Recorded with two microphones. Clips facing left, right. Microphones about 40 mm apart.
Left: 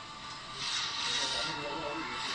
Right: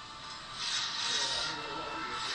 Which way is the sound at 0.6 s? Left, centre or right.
Left.